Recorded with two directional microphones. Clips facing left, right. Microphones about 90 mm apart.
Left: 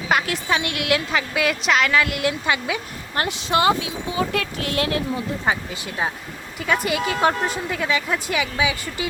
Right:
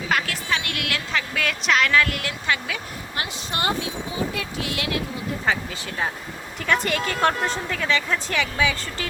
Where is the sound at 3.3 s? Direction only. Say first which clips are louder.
Left 6 dB; 90° left.